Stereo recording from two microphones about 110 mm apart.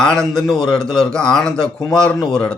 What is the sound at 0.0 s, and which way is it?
A man's voice, 5° left (ahead or behind).